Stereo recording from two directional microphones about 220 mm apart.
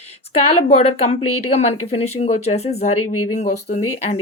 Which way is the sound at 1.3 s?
90° left.